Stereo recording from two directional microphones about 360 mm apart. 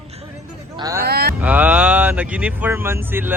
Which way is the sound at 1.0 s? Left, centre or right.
Right.